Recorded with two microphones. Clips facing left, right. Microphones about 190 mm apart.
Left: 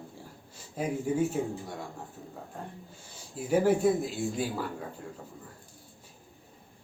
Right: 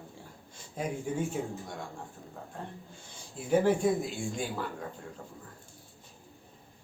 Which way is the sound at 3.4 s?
10° left (ahead or behind).